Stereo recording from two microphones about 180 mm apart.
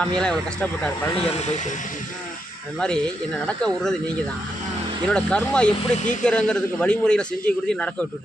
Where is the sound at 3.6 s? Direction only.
5° left (ahead or behind).